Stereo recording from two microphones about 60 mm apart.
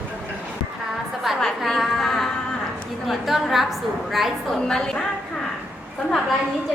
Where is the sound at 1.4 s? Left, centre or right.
Centre.